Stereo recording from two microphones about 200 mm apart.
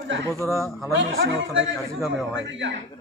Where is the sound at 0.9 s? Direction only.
70° right (ahead or behind).